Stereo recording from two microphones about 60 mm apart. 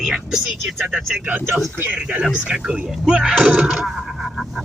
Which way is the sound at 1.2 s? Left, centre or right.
Right.